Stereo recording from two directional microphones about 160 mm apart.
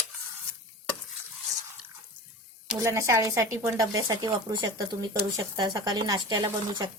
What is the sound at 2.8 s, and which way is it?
Speech, 20° right (ahead or behind).